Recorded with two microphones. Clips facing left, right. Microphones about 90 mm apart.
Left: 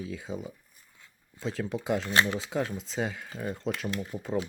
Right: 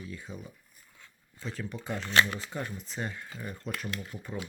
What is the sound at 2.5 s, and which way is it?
Speech, 90° left.